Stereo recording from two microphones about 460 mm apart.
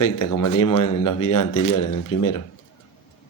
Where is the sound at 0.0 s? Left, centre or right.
Left.